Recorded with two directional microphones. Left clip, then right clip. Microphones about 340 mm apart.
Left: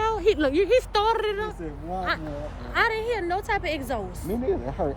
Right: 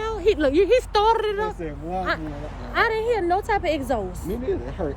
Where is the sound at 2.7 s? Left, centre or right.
Centre.